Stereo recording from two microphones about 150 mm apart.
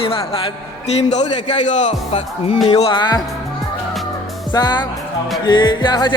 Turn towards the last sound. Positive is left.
turn(degrees=30)  # may be behind; listen again after turning